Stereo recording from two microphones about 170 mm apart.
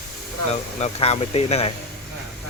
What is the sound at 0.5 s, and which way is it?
Speech, 40° left (ahead or behind).